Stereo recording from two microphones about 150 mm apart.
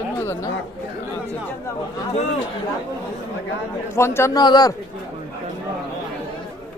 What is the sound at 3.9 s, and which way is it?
Speech, 15° left (ahead or behind).